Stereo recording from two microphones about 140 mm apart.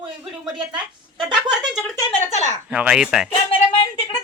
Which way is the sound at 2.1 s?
55° left (ahead or behind).